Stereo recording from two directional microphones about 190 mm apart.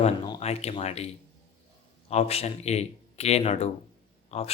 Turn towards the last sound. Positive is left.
turn(degrees=35)  # may be behind; listen again after turning